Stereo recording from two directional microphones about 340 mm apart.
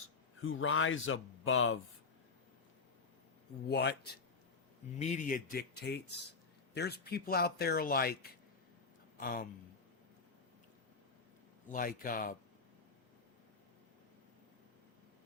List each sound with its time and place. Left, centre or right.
0.4 s speech: left
3.7 s speech: left
4.9 s speech: left
11.7 s speech: left